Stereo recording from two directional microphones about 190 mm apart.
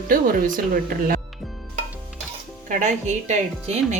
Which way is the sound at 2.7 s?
40° right (ahead or behind).